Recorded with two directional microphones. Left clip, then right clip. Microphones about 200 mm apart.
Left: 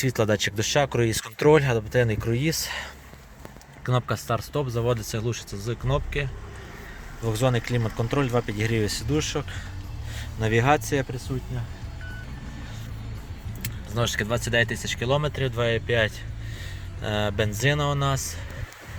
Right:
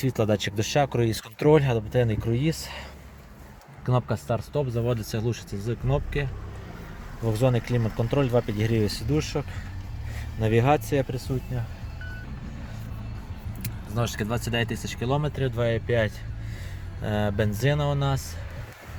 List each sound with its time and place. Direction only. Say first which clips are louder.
0.0 s speech: left 2 dB; centre (ahead or behind)
4.9 s speech: even; 5° right (ahead or behind)
7.3 s speech: even; centre (ahead or behind)
13.6 s speech: left 3 dB; centre (ahead or behind)